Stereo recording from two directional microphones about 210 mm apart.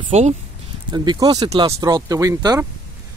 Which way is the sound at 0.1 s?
30° right (ahead or behind).